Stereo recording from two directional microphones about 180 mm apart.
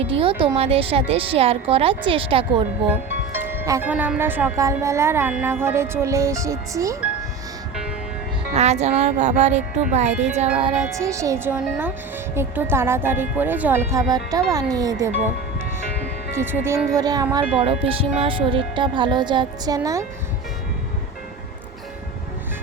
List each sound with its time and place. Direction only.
0.0 s a woman's voice: 30° right (ahead or behind)
3.3 s a woman's voice: 10° right (ahead or behind)
8.5 s a woman's voice: 40° right (ahead or behind)
10.8 s a woman's voice: 15° right (ahead or behind)
16.3 s a woman's voice: 15° right (ahead or behind)